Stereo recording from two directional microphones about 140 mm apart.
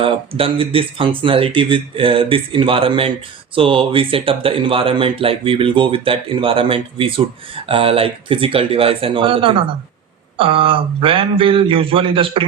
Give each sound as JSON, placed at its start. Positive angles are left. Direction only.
{"t": 0.0, "sound": "speech", "side_deg": -40}